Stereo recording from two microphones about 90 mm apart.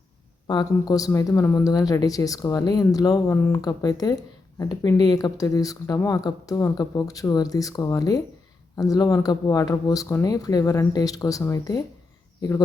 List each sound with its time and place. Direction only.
0.6 s speech: 40° left (ahead or behind)
1.3 s speech: 25° left (ahead or behind)
1.5 s speech: 40° left (ahead or behind)
3.3 s speech: 25° left (ahead or behind)
3.6 s speech: 45° left (ahead or behind)